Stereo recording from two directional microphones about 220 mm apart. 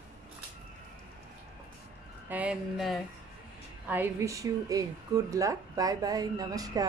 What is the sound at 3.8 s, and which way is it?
Speech, 10° right (ahead or behind).